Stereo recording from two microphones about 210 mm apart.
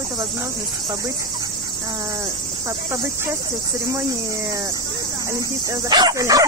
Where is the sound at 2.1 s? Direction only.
15° right (ahead or behind).